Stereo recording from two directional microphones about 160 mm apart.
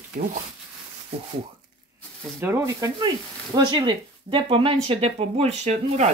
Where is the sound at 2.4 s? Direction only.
15° right (ahead or behind).